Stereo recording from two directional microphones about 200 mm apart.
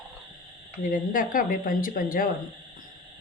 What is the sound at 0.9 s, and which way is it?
Speech, 45° left (ahead or behind).